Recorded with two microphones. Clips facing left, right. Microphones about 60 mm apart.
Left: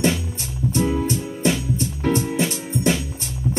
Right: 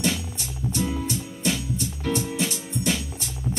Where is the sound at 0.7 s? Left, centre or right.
Left.